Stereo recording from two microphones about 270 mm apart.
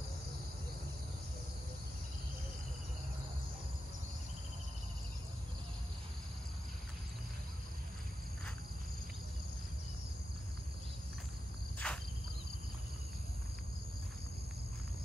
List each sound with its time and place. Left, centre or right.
11.8 s cricket: centre